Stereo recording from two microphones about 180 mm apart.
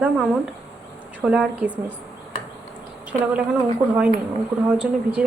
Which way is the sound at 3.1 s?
5° right (ahead or behind).